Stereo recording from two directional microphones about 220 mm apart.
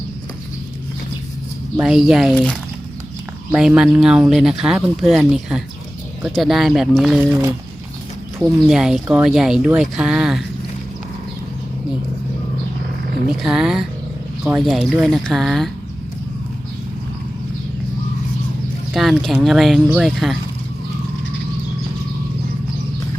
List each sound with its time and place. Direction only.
1.7 s speech: 5° right (ahead or behind)
13.3 s speech: centre (ahead or behind)
18.9 s speech: centre (ahead or behind)